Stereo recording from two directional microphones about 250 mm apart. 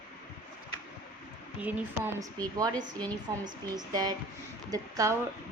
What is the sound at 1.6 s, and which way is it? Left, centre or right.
Speech, centre.